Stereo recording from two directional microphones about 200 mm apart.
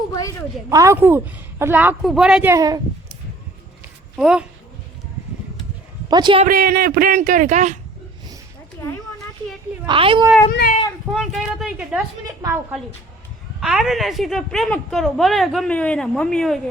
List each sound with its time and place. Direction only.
0.1 s a woman's voice: 15° left (ahead or behind)
0.7 s a woman's voice: 15° right (ahead or behind)
4.2 s a woman's voice: 5° right (ahead or behind)
6.1 s a child's voice: 20° right (ahead or behind)
6.5 s speech: 45° right (ahead or behind)
9.8 s a child's voice: 25° right (ahead or behind)
11.1 s a woman's voice: centre (ahead or behind)
12.4 s a woman's voice: 15° right (ahead or behind)
13.6 s a woman's voice: centre (ahead or behind)